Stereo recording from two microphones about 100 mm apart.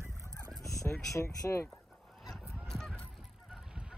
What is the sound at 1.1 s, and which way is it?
Speech, 30° left (ahead or behind).